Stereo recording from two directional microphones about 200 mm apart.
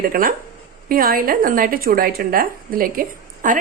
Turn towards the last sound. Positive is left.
turn(degrees=-40)  # may be behind; listen again after turning